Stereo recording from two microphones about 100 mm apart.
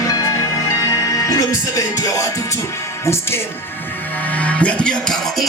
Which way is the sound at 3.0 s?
25° left (ahead or behind).